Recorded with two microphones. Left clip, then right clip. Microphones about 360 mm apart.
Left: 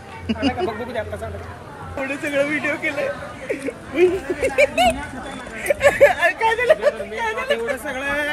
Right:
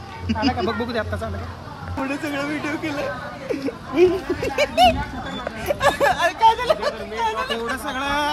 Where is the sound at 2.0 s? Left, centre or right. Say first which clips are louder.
Left 5 dB; centre.